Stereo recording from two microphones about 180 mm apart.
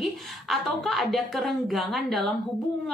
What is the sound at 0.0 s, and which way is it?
A woman's voice, centre (ahead or behind).